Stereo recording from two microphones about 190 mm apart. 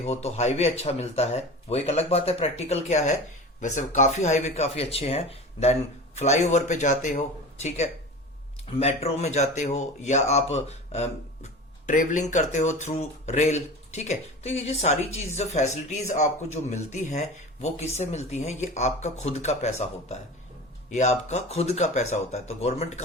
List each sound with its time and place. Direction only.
0.0 s speech: 35° left (ahead or behind)
8.7 s speech: 30° left (ahead or behind)